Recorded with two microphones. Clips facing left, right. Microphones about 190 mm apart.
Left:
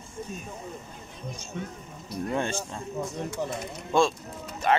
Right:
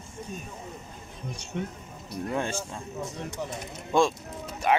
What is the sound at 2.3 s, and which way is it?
Speech, 5° right (ahead or behind).